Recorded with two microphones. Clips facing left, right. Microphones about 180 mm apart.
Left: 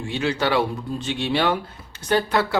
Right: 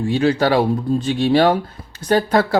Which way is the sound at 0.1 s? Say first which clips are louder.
Right 6 dB; 40° right (ahead or behind).